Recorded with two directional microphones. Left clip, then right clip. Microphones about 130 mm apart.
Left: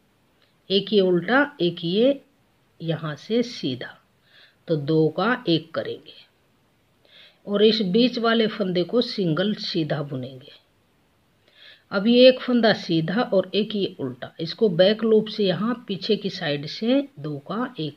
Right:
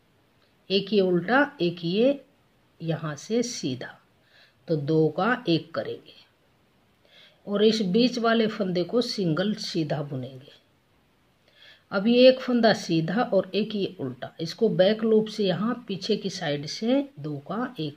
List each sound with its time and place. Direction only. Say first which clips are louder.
0.7 s speech: left 3 dB; 20° left (ahead or behind)